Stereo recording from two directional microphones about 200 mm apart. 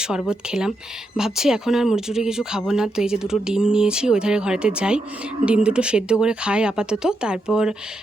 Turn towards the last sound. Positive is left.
turn(degrees=-5)  # may be behind; listen again after turning